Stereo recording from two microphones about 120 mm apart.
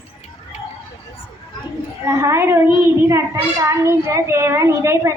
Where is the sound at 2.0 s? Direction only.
20° right (ahead or behind).